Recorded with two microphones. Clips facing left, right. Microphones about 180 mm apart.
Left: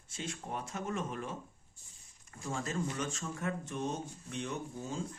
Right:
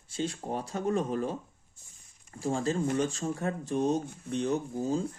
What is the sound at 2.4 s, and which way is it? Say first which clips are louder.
Speech: right 8 dB; 30° right (ahead or behind).